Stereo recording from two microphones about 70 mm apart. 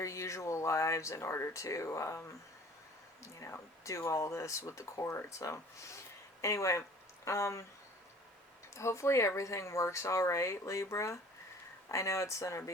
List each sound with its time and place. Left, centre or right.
0.0 s speech: left
8.7 s speech: left